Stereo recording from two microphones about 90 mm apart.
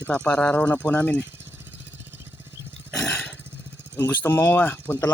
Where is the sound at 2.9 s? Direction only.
20° left (ahead or behind).